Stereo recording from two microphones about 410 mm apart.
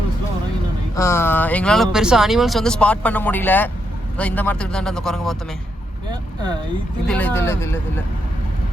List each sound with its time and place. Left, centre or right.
0.9 s speech: centre
6.1 s vehicle: centre
7.1 s speech: centre